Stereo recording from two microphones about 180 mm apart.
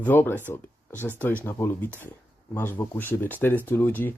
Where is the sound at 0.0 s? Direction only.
10° left (ahead or behind).